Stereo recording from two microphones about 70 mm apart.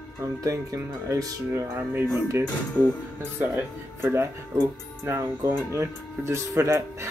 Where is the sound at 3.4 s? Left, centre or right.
Right.